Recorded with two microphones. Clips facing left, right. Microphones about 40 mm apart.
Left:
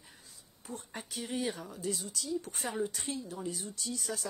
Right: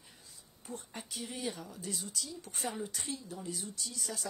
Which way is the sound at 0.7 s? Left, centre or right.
Centre.